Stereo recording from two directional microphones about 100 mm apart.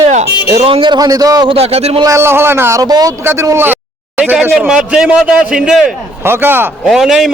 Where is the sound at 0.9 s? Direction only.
40° right (ahead or behind).